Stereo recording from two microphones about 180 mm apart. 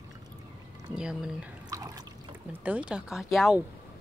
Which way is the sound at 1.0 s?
5° right (ahead or behind).